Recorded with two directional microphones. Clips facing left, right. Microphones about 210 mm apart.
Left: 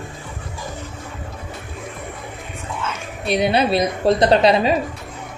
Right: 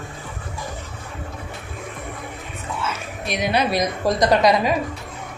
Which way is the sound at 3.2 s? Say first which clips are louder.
Left 4 dB; 30° left (ahead or behind).